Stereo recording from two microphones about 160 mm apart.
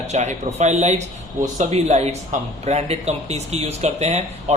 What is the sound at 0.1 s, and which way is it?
A man's voice, 45° right (ahead or behind).